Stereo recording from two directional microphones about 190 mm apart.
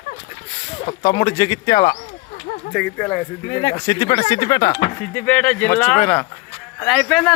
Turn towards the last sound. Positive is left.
turn(degrees=0)  # may be behind; listen again after turning